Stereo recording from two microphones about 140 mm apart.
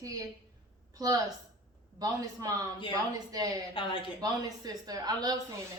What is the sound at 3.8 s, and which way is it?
Speech, 40° left (ahead or behind).